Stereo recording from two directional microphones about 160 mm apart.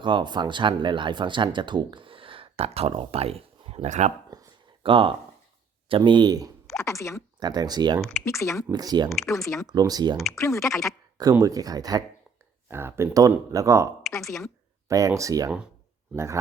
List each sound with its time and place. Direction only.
0.0 s speech: 30° right (ahead or behind); by 4.1 s 45° right (ahead or behind)
4.3 s a sound: 30° right (ahead or behind)
5.9 s speech: 30° right (ahead or behind)
6.7 s speech: 20° left (ahead or behind)
7.3 s speech: 25° right (ahead or behind)
8.0 s speech: 15° left (ahead or behind)
8.7 s speech: 25° right (ahead or behind)
9.2 s speech: 20° left (ahead or behind)
9.6 s speech: 25° right (ahead or behind)
10.3 s speech: 20° left (ahead or behind)
11.2 s speech: 20° right (ahead or behind)
14.2 s a woman's voice: centre (ahead or behind)
14.8 s speech: 20° right (ahead or behind)